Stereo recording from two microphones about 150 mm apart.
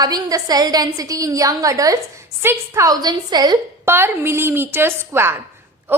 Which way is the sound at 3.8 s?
15° right (ahead or behind).